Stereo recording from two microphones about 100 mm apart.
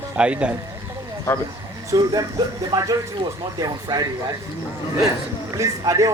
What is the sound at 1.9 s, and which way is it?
A man's voice, 40° right (ahead or behind).